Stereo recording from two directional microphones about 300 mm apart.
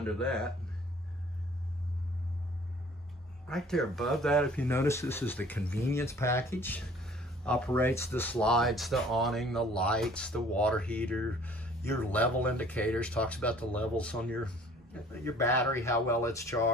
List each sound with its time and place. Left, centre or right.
0.0 s speech: centre
3.4 s speech: centre